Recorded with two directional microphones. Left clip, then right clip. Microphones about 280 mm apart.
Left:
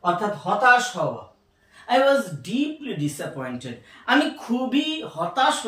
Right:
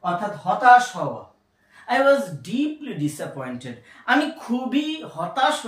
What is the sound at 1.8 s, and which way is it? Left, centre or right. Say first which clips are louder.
Speech: right 1 dB; centre.